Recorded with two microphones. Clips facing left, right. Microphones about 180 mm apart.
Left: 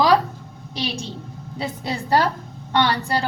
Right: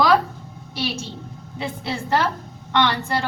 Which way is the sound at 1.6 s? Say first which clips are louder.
Even; 40° left (ahead or behind).